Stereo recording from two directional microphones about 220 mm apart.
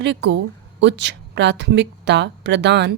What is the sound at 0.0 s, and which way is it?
A woman's voice, 55° right (ahead or behind).